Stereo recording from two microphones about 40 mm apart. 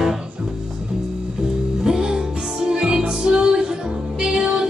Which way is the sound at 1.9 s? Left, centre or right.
Centre.